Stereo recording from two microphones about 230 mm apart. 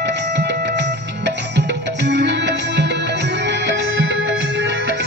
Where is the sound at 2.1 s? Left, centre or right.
Right.